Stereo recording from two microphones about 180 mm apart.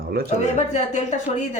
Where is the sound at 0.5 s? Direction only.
40° left (ahead or behind).